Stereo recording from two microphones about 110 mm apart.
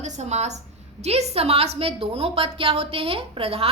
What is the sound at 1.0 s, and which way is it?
A woman's voice, 75° right (ahead or behind).